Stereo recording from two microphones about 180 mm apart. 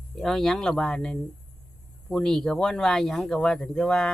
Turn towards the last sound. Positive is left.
turn(degrees=5)  # may be behind; listen again after turning